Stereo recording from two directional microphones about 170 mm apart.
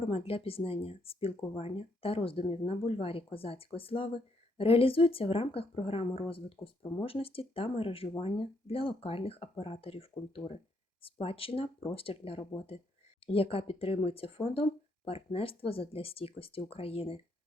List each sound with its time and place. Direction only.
0.1 s speech: 35° left (ahead or behind)